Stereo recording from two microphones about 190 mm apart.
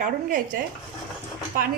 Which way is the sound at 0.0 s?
45° right (ahead or behind).